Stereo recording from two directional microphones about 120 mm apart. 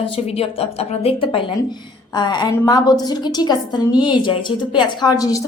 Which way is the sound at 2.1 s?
35° left (ahead or behind).